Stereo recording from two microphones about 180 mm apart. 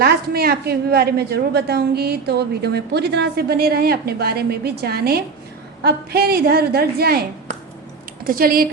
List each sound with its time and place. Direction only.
0.0 s a woman's voice: 60° right (ahead or behind)